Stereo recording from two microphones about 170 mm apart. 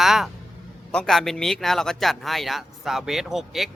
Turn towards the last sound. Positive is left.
turn(degrees=0)  # may be behind; listen again after turning